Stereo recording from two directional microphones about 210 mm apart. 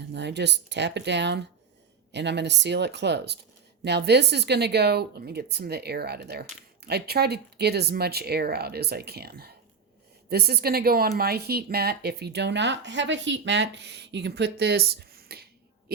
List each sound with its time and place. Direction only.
0.1 s speech: 55° right (ahead or behind)